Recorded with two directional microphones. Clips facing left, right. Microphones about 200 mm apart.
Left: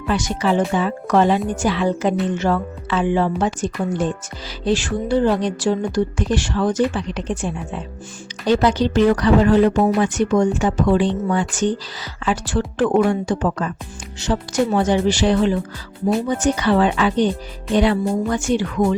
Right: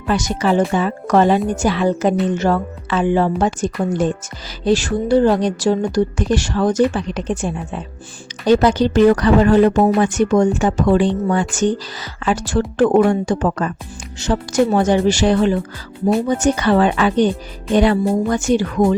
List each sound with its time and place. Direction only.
0.1 s speech: 45° right (ahead or behind)